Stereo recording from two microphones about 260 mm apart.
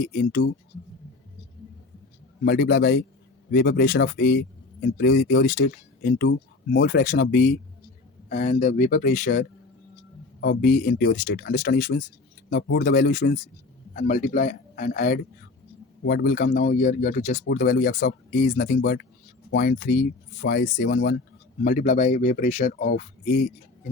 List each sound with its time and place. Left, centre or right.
0.0 s speech: left
2.4 s speech: left